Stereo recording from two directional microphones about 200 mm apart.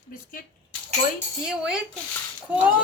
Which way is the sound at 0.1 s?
45° left (ahead or behind).